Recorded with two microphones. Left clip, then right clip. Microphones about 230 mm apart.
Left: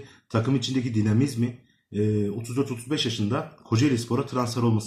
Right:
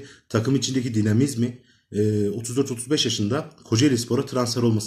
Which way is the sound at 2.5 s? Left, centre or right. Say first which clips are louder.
Right 4 dB; centre.